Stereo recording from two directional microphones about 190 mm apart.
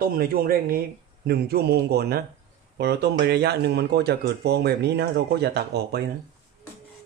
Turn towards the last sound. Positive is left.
turn(degrees=-60)  # may be behind; listen again after turning